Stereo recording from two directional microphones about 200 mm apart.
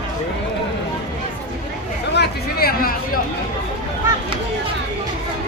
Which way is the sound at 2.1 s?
55° left (ahead or behind).